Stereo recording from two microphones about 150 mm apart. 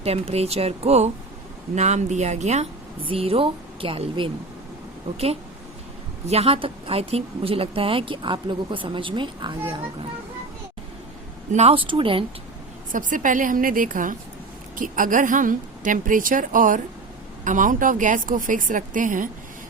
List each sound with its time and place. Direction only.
0.0 s speech: 45° right (ahead or behind)
3.1 s a woman's voice: 40° right (ahead or behind)
11.5 s a woman's voice: 40° right (ahead or behind)
12.9 s a woman's voice: 60° right (ahead or behind)